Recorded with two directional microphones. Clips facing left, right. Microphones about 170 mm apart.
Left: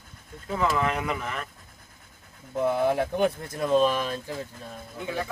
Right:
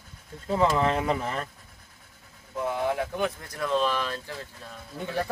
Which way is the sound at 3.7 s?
15° left (ahead or behind).